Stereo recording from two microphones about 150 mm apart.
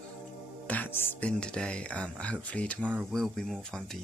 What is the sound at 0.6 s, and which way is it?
Speech, 10° left (ahead or behind).